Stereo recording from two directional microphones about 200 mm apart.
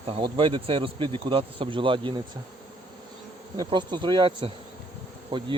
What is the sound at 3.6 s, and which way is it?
Speech, 20° right (ahead or behind).